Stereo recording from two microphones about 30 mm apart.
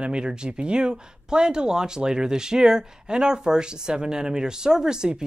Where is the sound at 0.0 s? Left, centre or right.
Right.